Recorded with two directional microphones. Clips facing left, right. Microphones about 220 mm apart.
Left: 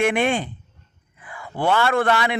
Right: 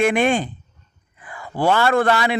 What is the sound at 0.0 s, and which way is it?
Speech, 40° right (ahead or behind).